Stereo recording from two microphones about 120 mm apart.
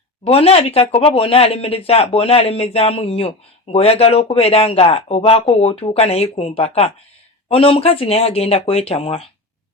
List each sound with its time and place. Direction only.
0.3 s speech: 55° left (ahead or behind)